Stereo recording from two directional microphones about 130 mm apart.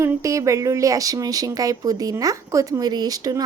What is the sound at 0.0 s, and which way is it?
A woman's voice, 25° right (ahead or behind).